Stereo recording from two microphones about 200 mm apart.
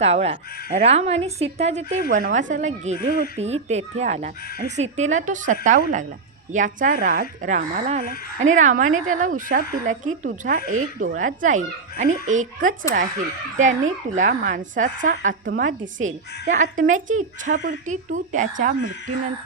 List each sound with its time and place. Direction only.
0.0 s a woman's voice: 30° right (ahead or behind)
8.0 s speech: 50° left (ahead or behind)
8.4 s a woman's voice: 40° right (ahead or behind)